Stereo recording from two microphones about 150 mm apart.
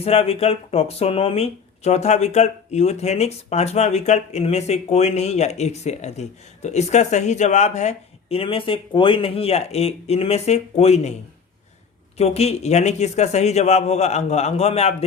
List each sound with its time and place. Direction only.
0.0 s speech: 40° left (ahead or behind)
12.1 s speech: 45° left (ahead or behind)